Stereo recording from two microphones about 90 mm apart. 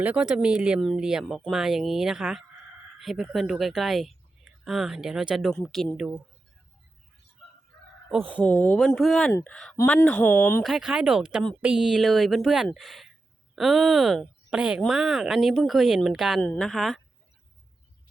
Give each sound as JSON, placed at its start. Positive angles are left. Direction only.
{"t": 0.0, "sound": "speech", "side_deg": -15}
{"t": 8.4, "sound": "speech", "side_deg": 20}
{"t": 8.8, "sound": "speech", "side_deg": 5}
{"t": 9.4, "sound": "speech", "side_deg": 10}
{"t": 10.6, "sound": "speech", "side_deg": 0}
{"t": 16.4, "sound": "speech", "side_deg": 15}
{"t": 16.6, "sound": "speech", "side_deg": 0}